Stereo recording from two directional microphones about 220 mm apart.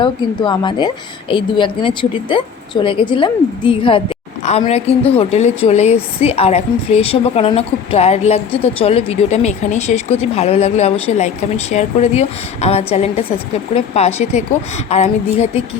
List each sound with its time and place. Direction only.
0.0 s a woman's voice: 20° left (ahead or behind)